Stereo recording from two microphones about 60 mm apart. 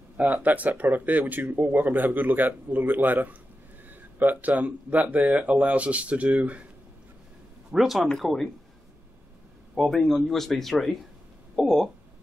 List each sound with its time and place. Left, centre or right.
0.2 s speech: right
7.7 s a man's voice: centre
9.8 s a man's voice: centre